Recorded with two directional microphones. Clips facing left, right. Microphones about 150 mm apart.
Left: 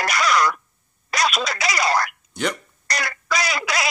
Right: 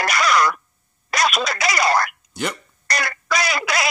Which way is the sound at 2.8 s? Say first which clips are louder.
Right 2 dB; 55° right (ahead or behind).